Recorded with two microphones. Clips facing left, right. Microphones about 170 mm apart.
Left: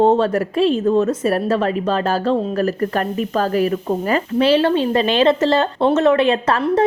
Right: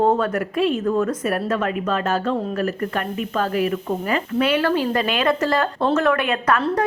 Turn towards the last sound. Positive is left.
turn(degrees=30)  # may be behind; listen again after turning